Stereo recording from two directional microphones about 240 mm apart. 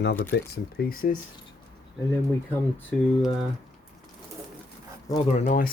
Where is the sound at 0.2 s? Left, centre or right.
Left.